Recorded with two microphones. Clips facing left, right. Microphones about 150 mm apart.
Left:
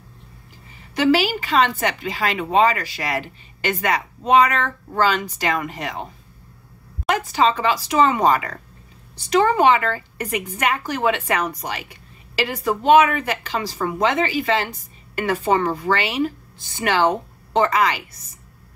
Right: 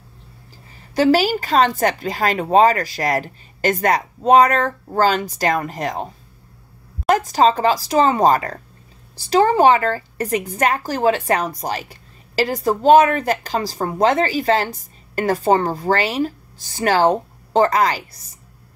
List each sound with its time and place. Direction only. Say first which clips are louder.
0.9 s a woman's voice: right 3 dB; 40° right (ahead or behind)
7.1 s a woman's voice: right 4 dB; 40° right (ahead or behind)